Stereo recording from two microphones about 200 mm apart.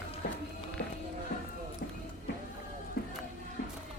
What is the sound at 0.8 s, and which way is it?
Music, 45° left (ahead or behind).